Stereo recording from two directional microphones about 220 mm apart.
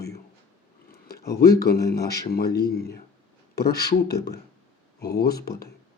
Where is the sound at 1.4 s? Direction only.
45° left (ahead or behind).